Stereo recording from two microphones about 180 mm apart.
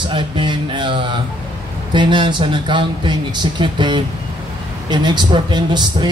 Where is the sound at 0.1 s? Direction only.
25° right (ahead or behind).